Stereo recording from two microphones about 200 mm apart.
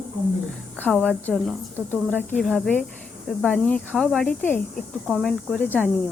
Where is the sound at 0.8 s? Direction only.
5° right (ahead or behind).